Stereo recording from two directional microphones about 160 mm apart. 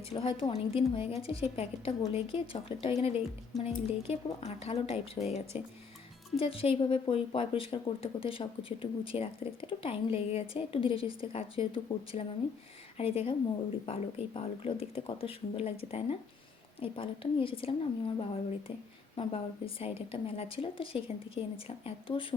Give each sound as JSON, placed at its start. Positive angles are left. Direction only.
{"t": 0.1, "sound": "speech", "side_deg": 30}
{"t": 3.5, "sound": "speech", "side_deg": 0}
{"t": 4.0, "sound": "speech", "side_deg": 40}